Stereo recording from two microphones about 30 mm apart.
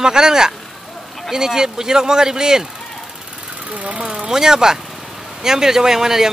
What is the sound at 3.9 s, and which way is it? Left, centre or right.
Speech, right.